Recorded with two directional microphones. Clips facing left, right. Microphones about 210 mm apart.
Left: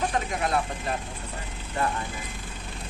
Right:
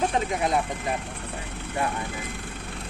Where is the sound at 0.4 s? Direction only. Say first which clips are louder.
Right 2 dB; 20° right (ahead or behind).